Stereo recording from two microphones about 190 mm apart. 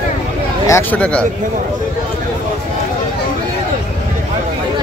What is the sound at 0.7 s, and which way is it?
Speech, 10° left (ahead or behind).